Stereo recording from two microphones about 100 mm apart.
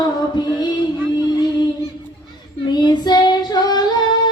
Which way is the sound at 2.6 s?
45° left (ahead or behind).